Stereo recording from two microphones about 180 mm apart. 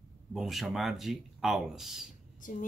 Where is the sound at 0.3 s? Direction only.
Centre (ahead or behind).